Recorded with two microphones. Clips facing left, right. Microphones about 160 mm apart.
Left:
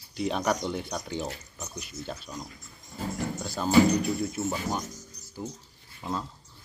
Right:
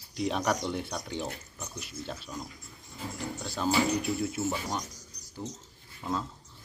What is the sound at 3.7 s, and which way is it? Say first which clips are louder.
Speech: left 6 dB; 40° left (ahead or behind).